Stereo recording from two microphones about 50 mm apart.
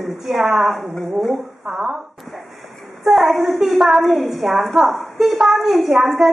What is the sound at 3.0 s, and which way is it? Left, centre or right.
A woman's voice, centre.